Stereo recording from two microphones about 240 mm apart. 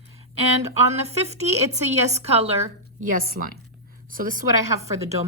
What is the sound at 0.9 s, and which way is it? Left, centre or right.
A woman's voice, right.